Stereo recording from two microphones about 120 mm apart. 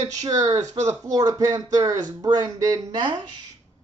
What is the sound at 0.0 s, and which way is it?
Speech, 30° right (ahead or behind).